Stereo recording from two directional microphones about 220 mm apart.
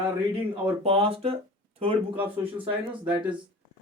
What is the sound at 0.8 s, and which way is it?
Speech, 25° right (ahead or behind).